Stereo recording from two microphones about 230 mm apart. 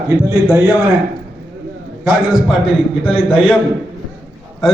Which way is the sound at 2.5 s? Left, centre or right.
Centre.